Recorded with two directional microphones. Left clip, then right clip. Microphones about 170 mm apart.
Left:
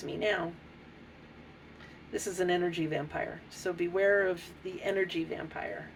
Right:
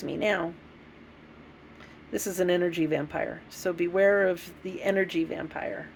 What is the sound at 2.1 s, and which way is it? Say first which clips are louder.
Speech: right 4 dB; 65° right (ahead or behind).